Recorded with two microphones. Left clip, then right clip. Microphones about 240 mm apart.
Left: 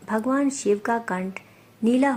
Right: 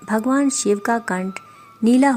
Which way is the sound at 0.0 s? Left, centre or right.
Right.